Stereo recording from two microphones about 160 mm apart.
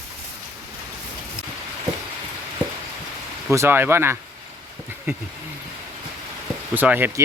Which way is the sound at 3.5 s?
15° right (ahead or behind).